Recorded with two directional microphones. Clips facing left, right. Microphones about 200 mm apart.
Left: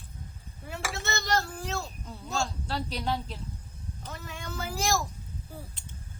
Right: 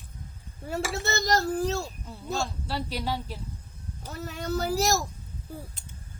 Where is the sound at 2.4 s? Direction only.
5° right (ahead or behind).